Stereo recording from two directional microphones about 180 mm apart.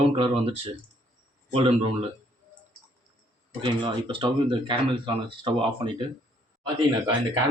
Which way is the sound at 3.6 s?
25° right (ahead or behind).